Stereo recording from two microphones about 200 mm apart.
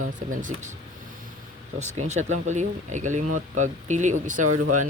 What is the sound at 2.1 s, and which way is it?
Speech, 35° right (ahead or behind).